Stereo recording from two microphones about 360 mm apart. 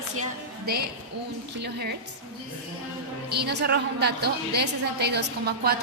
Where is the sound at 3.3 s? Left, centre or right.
Right.